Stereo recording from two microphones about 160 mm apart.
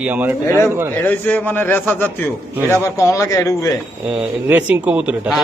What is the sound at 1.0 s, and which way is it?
A man's voice, 10° left (ahead or behind).